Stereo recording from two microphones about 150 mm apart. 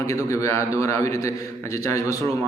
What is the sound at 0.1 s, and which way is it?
A man's voice, 20° left (ahead or behind).